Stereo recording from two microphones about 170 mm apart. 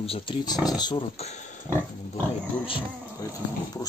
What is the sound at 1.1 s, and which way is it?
Speech, 40° left (ahead or behind).